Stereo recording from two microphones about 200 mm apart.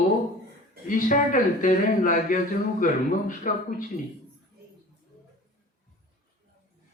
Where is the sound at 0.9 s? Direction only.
40° left (ahead or behind).